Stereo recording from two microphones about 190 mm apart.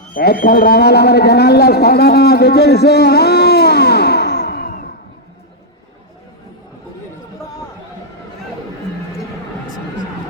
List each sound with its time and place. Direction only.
0.1 s a man's voice: 55° left (ahead or behind)